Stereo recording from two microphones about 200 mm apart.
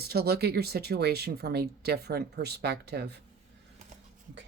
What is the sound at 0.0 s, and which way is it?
Speech, 50° right (ahead or behind).